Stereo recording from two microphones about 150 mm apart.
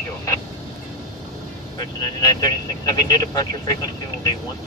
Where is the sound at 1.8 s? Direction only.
30° left (ahead or behind).